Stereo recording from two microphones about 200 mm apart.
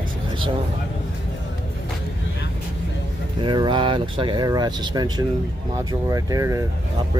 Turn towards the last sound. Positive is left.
turn(degrees=-15)  # may be behind; listen again after turning